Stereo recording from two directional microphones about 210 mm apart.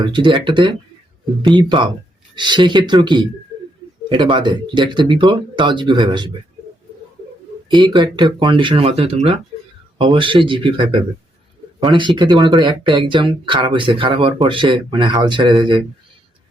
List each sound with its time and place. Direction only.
0.0 s speech: 25° right (ahead or behind)
7.7 s speech: 20° right (ahead or behind)